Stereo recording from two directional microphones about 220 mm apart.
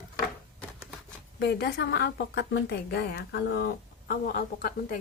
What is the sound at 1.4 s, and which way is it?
A woman's voice, 50° left (ahead or behind).